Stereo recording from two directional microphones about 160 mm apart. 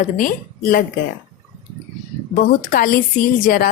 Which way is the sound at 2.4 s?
60° left (ahead or behind).